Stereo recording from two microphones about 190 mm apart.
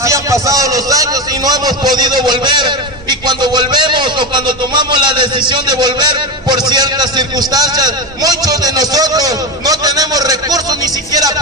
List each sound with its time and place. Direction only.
0.0 s a man's voice: 15° right (ahead or behind)